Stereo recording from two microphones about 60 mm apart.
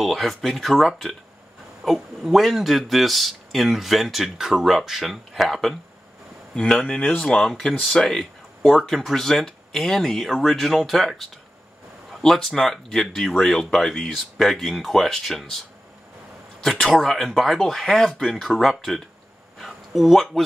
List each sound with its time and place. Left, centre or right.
0.0 s a man's voice: centre
6.5 s speech: centre
7.2 s a man's voice: centre
16.9 s a man's voice: centre